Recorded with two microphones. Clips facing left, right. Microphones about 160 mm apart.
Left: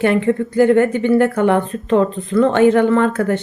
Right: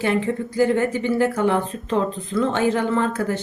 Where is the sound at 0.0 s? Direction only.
60° left (ahead or behind).